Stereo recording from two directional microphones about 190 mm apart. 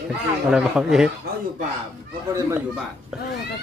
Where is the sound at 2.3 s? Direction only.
15° right (ahead or behind).